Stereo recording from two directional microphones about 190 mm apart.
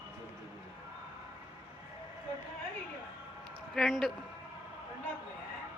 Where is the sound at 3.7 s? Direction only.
Centre (ahead or behind).